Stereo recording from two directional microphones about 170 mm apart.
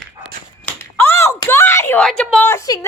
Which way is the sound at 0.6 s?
15° left (ahead or behind).